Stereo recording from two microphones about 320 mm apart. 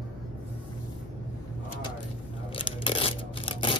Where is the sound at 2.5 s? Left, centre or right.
Centre.